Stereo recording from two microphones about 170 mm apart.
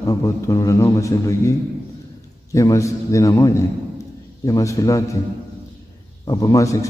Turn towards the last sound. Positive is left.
turn(degrees=20)  # may be behind; listen again after turning